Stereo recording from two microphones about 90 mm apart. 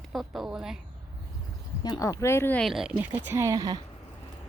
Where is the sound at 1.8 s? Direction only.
45° left (ahead or behind); by 2.5 s 30° left (ahead or behind).